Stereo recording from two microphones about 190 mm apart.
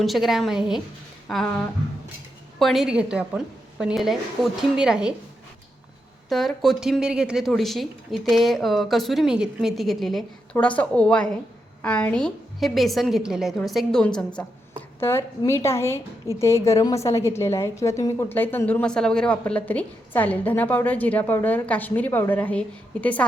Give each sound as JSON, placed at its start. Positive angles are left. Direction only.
{"t": 0.0, "sound": "speech", "side_deg": 0}
{"t": 6.2, "sound": "a woman's voice", "side_deg": 0}